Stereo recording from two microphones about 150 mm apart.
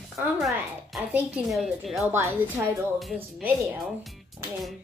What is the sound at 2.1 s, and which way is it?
Speech, 15° right (ahead or behind).